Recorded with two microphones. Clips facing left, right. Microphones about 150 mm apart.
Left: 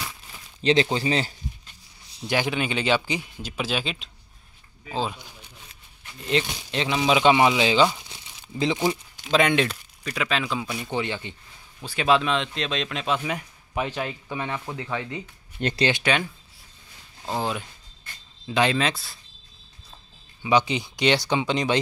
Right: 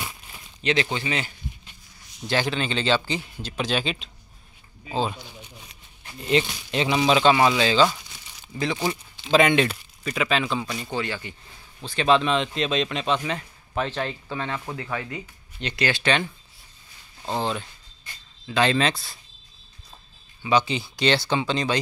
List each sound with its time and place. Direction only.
0.0 s a sound: 15° right (ahead or behind)
0.6 s speech: 30° left (ahead or behind)
2.2 s speech: 15° left (ahead or behind)
6.2 s speech: centre (ahead or behind)
7.2 s speech: 15° left (ahead or behind)
8.8 s speech: centre (ahead or behind)
10.9 s speech: 20° left (ahead or behind)
11.8 s speech: 10° left (ahead or behind)
15.9 s speech: 10° left (ahead or behind)
17.3 s speech: 10° left (ahead or behind)
20.4 s speech: 15° left (ahead or behind)